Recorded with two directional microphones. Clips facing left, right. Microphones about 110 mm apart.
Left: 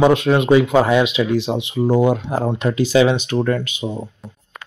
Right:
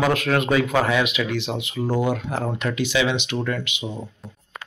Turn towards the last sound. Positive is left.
turn(degrees=40)  # may be behind; listen again after turning